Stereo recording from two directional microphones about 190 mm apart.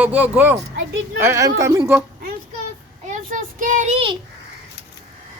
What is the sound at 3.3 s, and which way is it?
Child singing, 45° right (ahead or behind).